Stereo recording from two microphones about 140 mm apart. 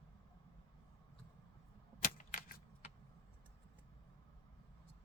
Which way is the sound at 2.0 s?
90° left.